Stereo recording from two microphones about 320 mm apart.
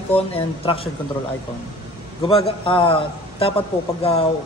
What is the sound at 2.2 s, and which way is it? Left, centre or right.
Speech, centre.